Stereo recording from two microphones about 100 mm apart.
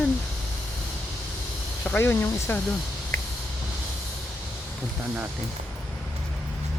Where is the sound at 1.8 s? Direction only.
25° left (ahead or behind).